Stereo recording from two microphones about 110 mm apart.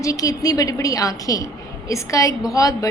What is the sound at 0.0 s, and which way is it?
A woman's voice, 30° left (ahead or behind).